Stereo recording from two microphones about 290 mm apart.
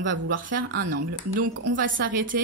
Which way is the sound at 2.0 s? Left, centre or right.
Right.